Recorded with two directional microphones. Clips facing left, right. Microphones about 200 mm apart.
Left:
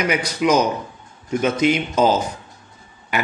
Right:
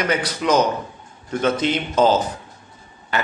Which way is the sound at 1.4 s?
10° left (ahead or behind).